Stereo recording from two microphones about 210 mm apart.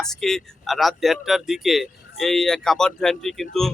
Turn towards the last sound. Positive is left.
turn(degrees=0)  # may be behind; listen again after turning